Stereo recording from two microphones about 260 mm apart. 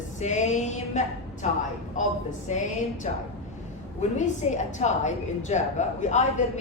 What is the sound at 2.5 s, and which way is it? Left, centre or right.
Speech, left.